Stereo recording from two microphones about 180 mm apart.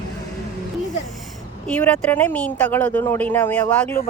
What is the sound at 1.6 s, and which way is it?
Speech, 5° left (ahead or behind).